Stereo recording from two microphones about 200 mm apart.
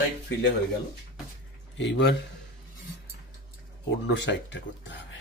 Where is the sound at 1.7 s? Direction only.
60° left (ahead or behind).